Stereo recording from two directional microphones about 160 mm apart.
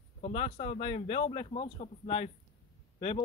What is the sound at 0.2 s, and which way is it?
Speech, 40° left (ahead or behind).